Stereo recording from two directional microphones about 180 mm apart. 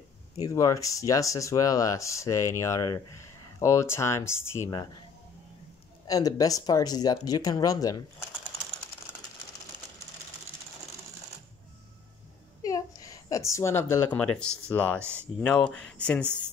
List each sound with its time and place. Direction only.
0.4 s speech: 20° left (ahead or behind)
6.0 s speech: 20° left (ahead or behind)
12.6 s speech: 20° left (ahead or behind)